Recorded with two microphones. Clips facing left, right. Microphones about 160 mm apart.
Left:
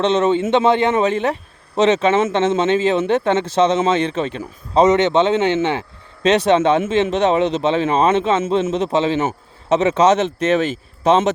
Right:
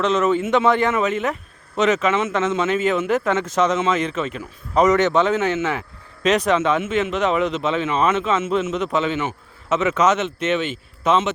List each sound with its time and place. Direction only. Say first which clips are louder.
0.0 s a man's voice: left 3 dB; 30° left (ahead or behind)